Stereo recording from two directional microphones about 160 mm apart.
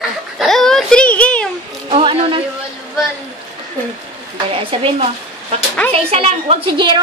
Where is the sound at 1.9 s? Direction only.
35° right (ahead or behind).